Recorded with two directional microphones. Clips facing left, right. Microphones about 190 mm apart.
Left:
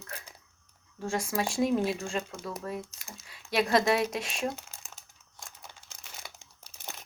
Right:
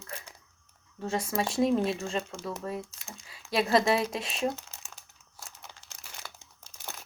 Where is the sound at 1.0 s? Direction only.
25° right (ahead or behind).